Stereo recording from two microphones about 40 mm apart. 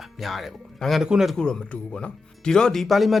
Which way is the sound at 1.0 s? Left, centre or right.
Centre.